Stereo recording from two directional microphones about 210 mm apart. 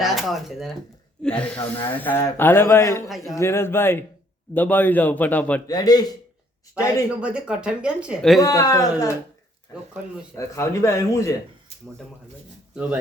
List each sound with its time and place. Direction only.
0.0 s speech: centre (ahead or behind)
3.1 s speech: centre (ahead or behind)
3.3 s speech: 10° left (ahead or behind)
5.6 s a man's voice: 20° left (ahead or behind)
7.2 s speech: 5° right (ahead or behind)
8.4 s speech: 15° left (ahead or behind)
10.3 s speech: 15° left (ahead or behind)